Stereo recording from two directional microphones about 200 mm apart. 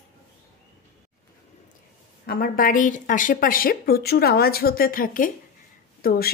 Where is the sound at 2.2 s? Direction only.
45° left (ahead or behind).